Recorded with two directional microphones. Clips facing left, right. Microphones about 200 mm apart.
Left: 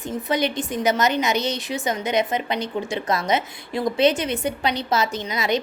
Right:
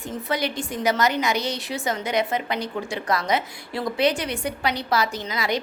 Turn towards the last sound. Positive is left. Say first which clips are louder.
# left 3 dB
turn(degrees=20)  # may be behind; listen again after turning